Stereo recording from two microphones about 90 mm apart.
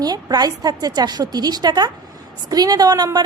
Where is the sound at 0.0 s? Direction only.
45° right (ahead or behind).